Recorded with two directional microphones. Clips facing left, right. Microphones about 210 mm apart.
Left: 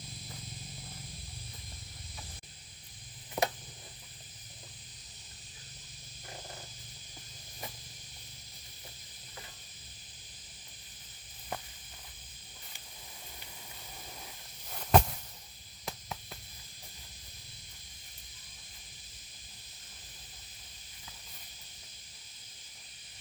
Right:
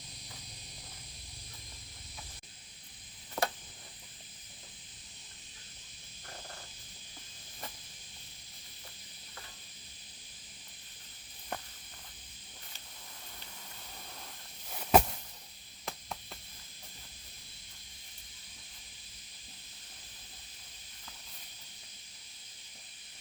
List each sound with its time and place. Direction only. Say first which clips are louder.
3.4 s cricket: left 2 dB; 15° left (ahead or behind)
14.7 s a sound: right 1 dB; 5° right (ahead or behind)
15.9 s chop: left 1 dB; centre (ahead or behind)